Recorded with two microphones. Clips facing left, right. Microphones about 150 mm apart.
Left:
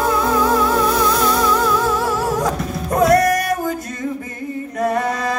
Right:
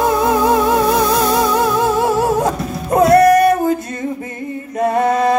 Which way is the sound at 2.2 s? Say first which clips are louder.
Right 4 dB; 25° right (ahead or behind).